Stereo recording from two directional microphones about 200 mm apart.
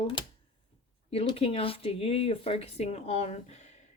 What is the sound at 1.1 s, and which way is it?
Speech, 30° left (ahead or behind).